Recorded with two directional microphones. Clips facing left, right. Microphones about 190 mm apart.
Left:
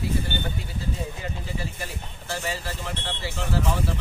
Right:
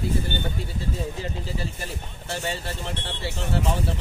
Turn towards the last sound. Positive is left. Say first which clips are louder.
# even
turn(degrees=-30)  # may be behind; listen again after turning